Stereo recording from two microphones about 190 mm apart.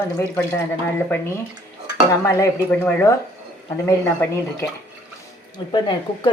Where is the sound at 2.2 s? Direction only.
15° left (ahead or behind).